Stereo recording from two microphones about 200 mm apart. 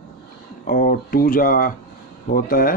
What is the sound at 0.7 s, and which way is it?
Speech, 45° left (ahead or behind).